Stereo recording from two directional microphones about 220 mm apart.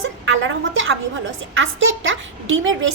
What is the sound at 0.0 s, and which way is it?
A woman's voice, 60° right (ahead or behind).